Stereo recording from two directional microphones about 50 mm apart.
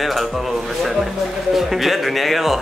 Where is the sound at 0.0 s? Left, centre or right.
Centre.